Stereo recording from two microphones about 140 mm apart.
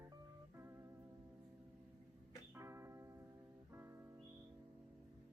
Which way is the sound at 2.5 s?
20° right (ahead or behind).